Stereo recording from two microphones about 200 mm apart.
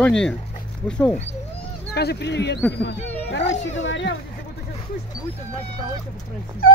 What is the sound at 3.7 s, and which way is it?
Speech, 65° left (ahead or behind).